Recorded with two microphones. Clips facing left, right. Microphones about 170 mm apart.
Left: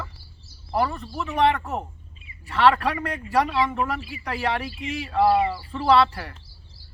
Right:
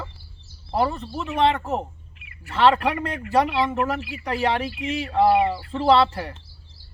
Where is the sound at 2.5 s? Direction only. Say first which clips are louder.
Right 1 dB; 25° right (ahead or behind).